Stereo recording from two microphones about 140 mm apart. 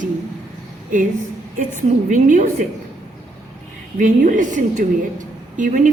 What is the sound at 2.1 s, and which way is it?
Speech, 65° right (ahead or behind).